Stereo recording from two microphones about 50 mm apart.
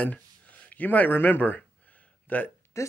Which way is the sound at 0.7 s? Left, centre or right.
Left.